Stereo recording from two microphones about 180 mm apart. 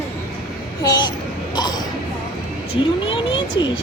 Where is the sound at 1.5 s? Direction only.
25° left (ahead or behind).